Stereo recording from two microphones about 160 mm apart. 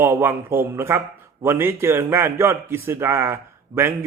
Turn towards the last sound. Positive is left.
turn(degrees=-15)  # may be behind; listen again after turning